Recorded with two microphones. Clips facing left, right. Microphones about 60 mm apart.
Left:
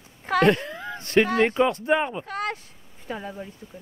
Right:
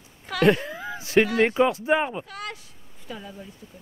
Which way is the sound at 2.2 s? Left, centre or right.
Left.